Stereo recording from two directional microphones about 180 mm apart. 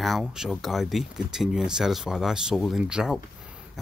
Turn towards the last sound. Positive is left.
turn(degrees=-5)  # may be behind; listen again after turning